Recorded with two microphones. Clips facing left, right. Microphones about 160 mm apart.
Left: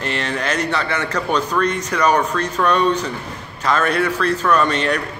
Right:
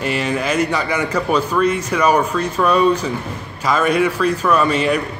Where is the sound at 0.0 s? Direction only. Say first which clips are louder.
Right 3 dB; 10° right (ahead or behind).